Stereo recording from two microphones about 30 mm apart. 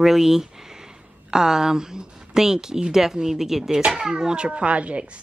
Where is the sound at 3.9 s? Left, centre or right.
Right.